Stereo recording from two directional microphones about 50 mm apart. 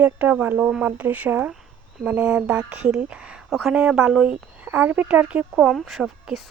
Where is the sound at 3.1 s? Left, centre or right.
Right.